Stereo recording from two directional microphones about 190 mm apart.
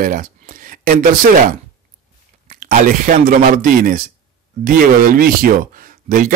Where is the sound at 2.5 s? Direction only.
45° right (ahead or behind).